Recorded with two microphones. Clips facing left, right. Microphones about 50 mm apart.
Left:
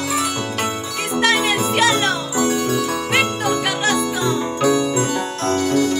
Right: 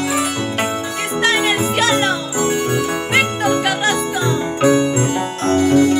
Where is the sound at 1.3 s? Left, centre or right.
Right.